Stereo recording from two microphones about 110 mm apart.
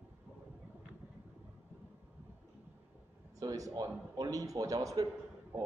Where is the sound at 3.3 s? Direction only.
30° right (ahead or behind).